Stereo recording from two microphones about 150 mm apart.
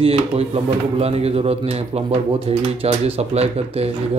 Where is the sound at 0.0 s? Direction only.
40° right (ahead or behind).